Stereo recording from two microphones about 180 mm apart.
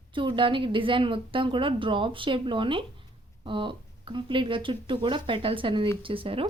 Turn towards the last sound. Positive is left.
turn(degrees=-30)  # may be behind; listen again after turning